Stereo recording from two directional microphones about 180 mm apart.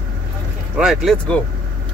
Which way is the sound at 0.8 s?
Centre (ahead or behind).